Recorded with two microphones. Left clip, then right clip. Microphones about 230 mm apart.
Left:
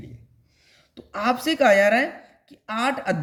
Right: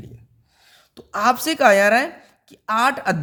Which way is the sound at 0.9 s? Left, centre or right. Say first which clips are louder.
Right 5 dB; right.